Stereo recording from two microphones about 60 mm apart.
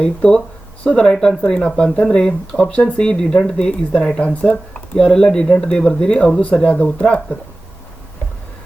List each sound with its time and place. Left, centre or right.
0.0 s speech: centre